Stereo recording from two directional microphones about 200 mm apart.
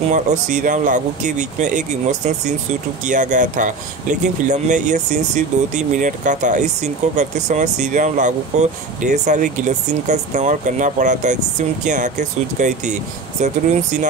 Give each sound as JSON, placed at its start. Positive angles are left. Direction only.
{"t": 0.1, "sound": "speech", "side_deg": -35}